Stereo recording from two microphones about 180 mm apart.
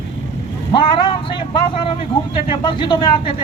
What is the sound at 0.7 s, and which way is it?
Speech, 25° left (ahead or behind).